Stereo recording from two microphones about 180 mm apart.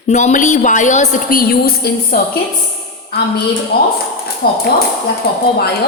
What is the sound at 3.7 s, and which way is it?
Speech, 60° left (ahead or behind).